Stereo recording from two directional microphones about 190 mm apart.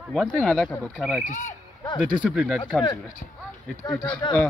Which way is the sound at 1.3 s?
45° left (ahead or behind).